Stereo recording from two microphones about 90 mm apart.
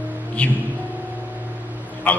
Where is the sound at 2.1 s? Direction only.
20° left (ahead or behind).